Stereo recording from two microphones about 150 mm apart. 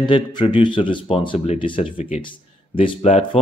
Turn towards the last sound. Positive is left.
turn(degrees=45)  # may be behind; listen again after turning